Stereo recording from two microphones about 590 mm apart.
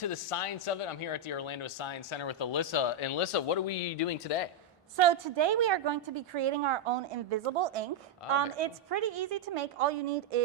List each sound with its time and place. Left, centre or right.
0.0 s speech: left
4.9 s a woman's voice: right